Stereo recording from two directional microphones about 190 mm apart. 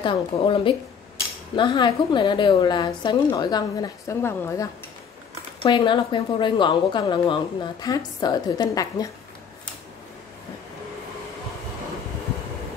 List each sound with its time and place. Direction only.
0.0 s a woman's voice: 25° left (ahead or behind)
5.6 s a woman's voice: 25° left (ahead or behind)